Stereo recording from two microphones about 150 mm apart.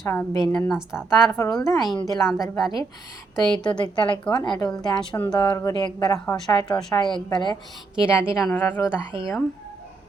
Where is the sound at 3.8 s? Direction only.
30° left (ahead or behind).